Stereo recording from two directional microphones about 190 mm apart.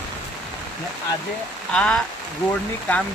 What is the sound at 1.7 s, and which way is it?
Speech, 5° left (ahead or behind).